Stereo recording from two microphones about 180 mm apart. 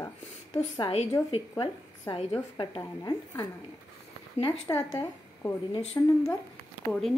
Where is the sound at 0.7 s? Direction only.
35° left (ahead or behind); by 4.8 s 20° left (ahead or behind).